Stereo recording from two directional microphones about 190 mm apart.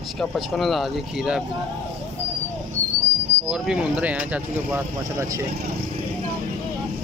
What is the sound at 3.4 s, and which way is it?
Speech, 5° right (ahead or behind).